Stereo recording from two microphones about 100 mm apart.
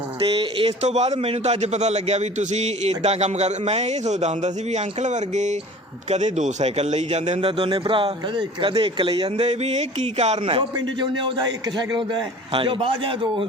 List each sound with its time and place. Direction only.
0.2 s a man's voice: 65° right (ahead or behind); by 4.3 s 90° right
6.1 s a man's voice: 90° right; by 9.3 s 55° right (ahead or behind)
9.4 s a man's voice: 90° right
10.2 s a man's voice: 70° right (ahead or behind)
10.8 s a man's voice: 50° right (ahead or behind)